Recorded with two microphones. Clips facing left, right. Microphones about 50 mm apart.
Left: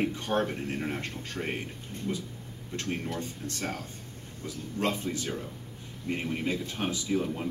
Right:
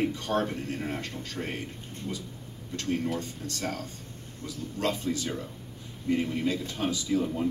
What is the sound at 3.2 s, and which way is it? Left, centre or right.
A man's voice, left.